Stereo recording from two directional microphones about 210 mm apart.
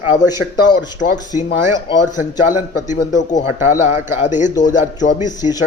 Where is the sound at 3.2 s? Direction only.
35° left (ahead or behind).